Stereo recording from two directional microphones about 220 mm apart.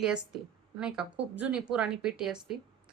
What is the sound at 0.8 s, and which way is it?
A woman's voice, 5° right (ahead or behind).